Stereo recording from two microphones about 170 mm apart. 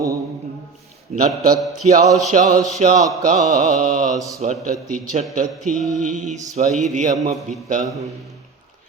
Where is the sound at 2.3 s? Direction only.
50° right (ahead or behind).